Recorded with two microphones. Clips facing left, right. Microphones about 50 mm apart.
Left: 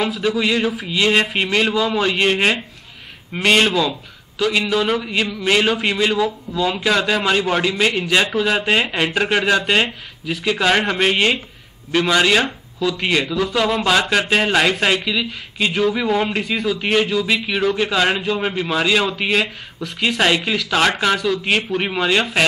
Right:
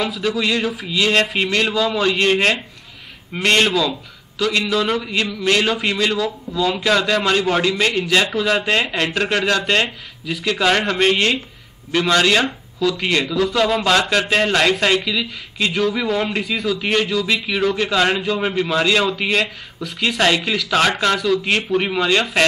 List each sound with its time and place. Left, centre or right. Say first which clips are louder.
0.0 s a man's voice: left 1 dB; centre
0.8 s a man's voice: right 1 dB; centre